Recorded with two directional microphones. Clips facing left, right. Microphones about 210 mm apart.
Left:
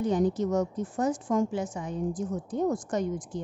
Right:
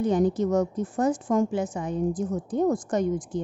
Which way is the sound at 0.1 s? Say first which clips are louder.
Right 3 dB; 55° right (ahead or behind).